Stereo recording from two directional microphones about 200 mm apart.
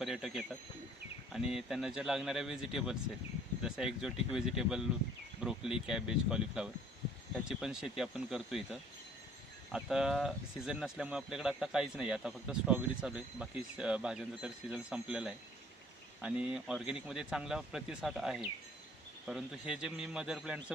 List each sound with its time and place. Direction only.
0.0 s speech: centre (ahead or behind)